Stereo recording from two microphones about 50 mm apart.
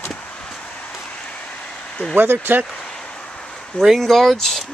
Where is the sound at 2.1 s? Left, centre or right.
Right.